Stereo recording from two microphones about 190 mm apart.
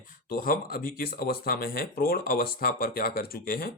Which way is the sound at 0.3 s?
50° left (ahead or behind).